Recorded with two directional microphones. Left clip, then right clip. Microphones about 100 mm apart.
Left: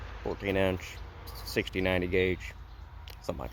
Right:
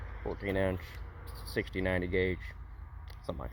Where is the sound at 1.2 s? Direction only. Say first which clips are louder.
Left 6 dB; centre (ahead or behind).